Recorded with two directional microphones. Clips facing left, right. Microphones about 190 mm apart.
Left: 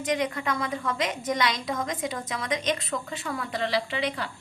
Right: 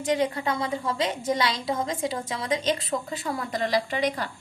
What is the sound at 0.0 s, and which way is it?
A woman's voice, 30° right (ahead or behind).